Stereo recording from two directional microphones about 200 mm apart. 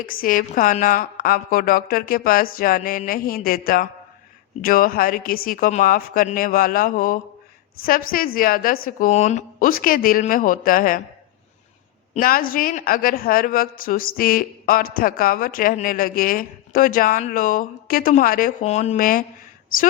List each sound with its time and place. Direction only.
0.0 s speech: 45° left (ahead or behind)
12.1 s speech: 45° left (ahead or behind)
18.6 s speech: 35° left (ahead or behind)